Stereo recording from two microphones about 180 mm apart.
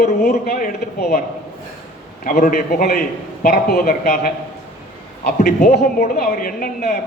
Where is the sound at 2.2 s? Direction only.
50° left (ahead or behind).